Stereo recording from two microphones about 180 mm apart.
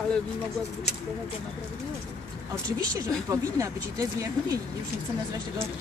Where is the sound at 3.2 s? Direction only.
20° right (ahead or behind).